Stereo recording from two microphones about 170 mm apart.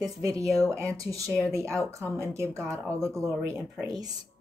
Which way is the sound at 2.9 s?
15° right (ahead or behind).